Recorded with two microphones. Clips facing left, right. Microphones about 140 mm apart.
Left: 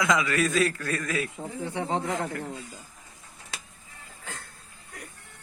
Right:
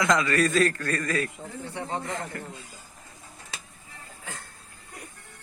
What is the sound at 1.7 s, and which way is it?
Speech, 75° left (ahead or behind).